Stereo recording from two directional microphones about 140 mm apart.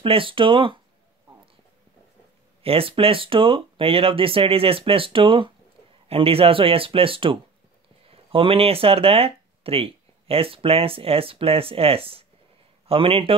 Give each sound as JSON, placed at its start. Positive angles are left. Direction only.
{"t": 0.0, "sound": "speech", "side_deg": -40}
{"t": 2.6, "sound": "speech", "side_deg": -40}